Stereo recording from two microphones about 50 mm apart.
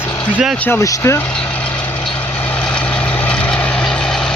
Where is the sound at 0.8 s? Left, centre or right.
Left.